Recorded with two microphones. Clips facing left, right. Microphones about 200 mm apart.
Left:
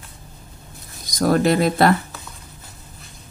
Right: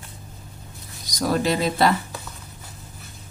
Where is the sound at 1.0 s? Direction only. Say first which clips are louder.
Left 5 dB; 50° left (ahead or behind).